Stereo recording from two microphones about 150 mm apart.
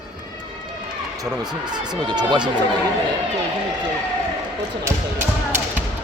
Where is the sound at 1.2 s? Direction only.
30° right (ahead or behind).